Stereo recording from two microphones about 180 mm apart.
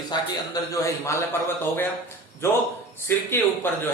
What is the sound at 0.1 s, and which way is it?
Speech, 20° left (ahead or behind).